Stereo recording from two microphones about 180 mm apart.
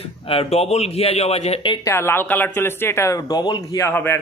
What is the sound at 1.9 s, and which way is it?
A man's voice, 15° left (ahead or behind).